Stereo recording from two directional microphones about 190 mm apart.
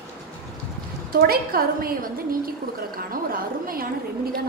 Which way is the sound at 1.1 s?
50° right (ahead or behind).